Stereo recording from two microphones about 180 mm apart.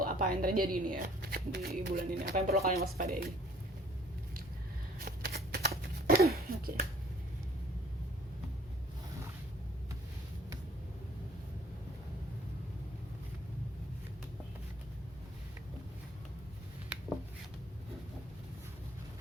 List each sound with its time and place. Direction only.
0.0 s a woman's voice: 50° right (ahead or behind)
4.9 s shuffling cards: 55° right (ahead or behind)